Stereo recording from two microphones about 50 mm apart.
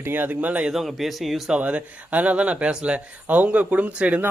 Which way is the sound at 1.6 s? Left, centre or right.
Right.